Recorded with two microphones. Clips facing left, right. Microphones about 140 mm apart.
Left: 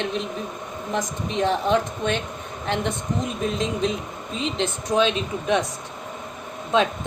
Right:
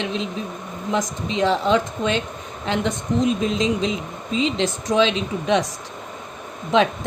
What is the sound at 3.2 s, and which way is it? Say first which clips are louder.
Speech: right 5 dB; 90° right.